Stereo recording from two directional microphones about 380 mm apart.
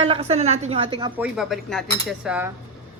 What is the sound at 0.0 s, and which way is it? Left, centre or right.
A woman's voice, centre.